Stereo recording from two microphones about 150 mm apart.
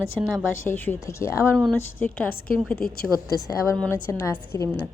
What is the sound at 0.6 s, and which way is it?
A woman's voice, 15° left (ahead or behind).